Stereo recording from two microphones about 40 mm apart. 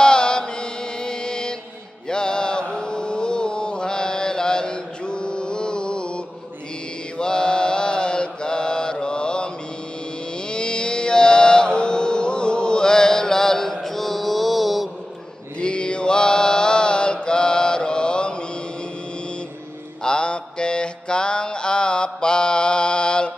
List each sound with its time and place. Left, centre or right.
0.0 s mantra: left
10.5 s mantra: left; by 14.9 s centre
15.6 s mantra: left
20.0 s mantra: left